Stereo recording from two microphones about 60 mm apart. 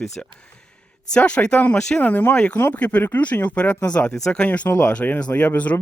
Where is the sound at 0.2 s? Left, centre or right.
Centre.